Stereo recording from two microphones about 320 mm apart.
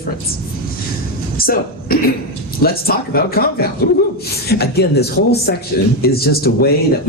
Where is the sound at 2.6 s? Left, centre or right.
Left.